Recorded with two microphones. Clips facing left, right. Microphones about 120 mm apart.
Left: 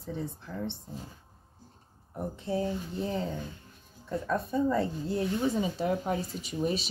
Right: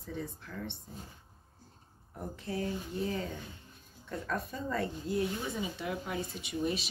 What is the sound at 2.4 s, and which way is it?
Speech, 30° left (ahead or behind).